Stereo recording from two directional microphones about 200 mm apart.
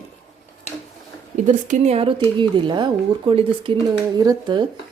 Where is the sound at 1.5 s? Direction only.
40° right (ahead or behind).